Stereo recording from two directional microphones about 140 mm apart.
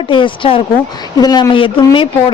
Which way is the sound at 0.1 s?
40° left (ahead or behind).